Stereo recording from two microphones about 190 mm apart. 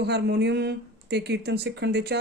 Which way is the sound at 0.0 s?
60° right (ahead or behind).